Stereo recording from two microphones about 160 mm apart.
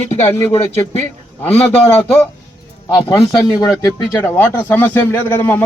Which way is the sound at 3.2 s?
25° left (ahead or behind).